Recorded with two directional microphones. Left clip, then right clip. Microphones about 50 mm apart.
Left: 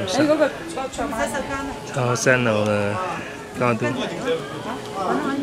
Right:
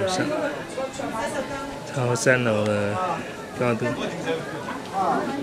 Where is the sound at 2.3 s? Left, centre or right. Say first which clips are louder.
Left 3 dB; centre.